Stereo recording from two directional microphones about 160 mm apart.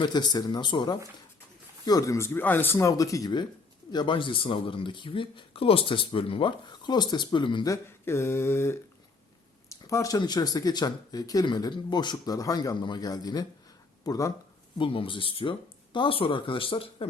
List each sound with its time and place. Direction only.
0.0 s speech: 25° left (ahead or behind)
14.8 s speech: 35° left (ahead or behind)